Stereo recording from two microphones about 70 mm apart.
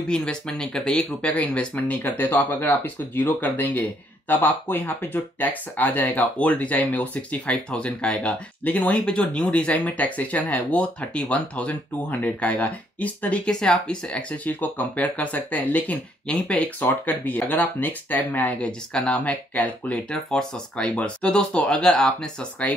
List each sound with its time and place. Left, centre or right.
0.1 s speech: centre
18.6 s speech: centre